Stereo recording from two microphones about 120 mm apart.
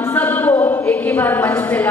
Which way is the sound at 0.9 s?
15° left (ahead or behind).